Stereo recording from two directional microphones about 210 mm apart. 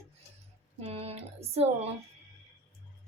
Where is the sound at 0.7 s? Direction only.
30° right (ahead or behind).